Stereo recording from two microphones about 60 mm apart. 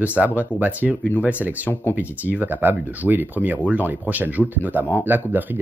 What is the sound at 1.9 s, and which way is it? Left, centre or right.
Speech, right.